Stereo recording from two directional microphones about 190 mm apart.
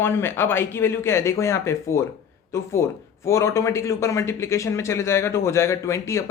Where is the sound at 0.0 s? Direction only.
10° left (ahead or behind).